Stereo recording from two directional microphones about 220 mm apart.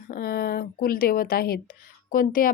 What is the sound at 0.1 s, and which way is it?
A woman's voice, 45° left (ahead or behind).